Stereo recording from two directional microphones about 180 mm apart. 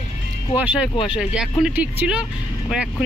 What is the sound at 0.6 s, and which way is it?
Speech, 5° right (ahead or behind).